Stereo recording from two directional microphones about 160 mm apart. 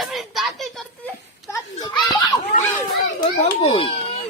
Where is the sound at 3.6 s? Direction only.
35° left (ahead or behind).